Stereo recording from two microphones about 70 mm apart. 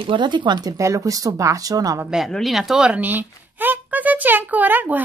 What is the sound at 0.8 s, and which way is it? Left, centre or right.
Speech, right.